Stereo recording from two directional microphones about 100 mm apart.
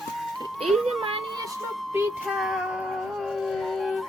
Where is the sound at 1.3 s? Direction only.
35° right (ahead or behind).